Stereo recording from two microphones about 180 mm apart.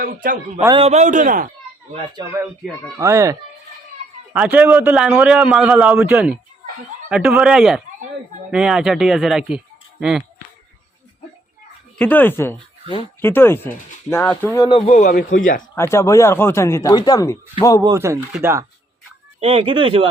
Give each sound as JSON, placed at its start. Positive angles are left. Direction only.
{"t": 0.0, "sound": "a man's voice", "side_deg": -50}
{"t": 0.8, "sound": "a man's voice", "side_deg": -40}
{"t": 1.9, "sound": "speech", "side_deg": -30}
{"t": 3.0, "sound": "a man's voice", "side_deg": -15}
{"t": 4.4, "sound": "a man's voice", "side_deg": -10}
{"t": 11.9, "sound": "speech", "side_deg": 10}
{"t": 14.8, "sound": "a man's voice", "side_deg": 45}
{"t": 15.7, "sound": "speech", "side_deg": 15}
{"t": 17.8, "sound": "a man's voice", "side_deg": -15}
{"t": 19.4, "sound": "speech", "side_deg": -30}